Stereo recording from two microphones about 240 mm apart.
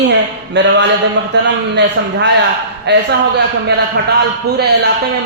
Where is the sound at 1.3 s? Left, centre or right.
Right.